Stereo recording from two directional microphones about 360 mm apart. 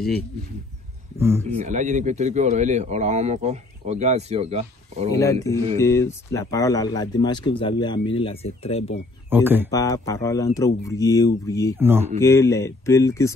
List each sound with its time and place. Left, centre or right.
1.4 s speech: centre
5.2 s speech: centre
9.3 s speech: centre
9.7 s speech: centre
11.8 s speech: centre
12.2 s speech: centre